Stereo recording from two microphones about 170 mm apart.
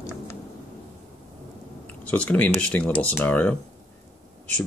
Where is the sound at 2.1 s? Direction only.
10° left (ahead or behind).